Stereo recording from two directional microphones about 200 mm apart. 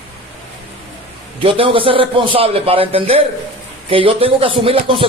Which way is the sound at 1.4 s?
25° right (ahead or behind).